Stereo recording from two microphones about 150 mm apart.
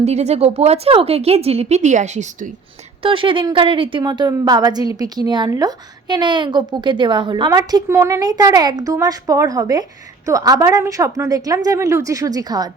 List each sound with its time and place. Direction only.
0.0 s a woman's voice: 45° right (ahead or behind)
3.0 s a woman's voice: 35° right (ahead or behind)